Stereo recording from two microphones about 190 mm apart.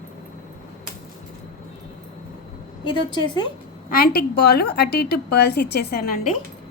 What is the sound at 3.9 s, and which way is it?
A woman's voice, 55° left (ahead or behind).